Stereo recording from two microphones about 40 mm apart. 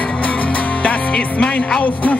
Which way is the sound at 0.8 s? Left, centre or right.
Left.